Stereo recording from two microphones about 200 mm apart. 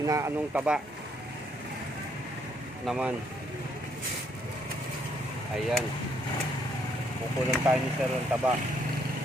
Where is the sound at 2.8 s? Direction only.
5° right (ahead or behind).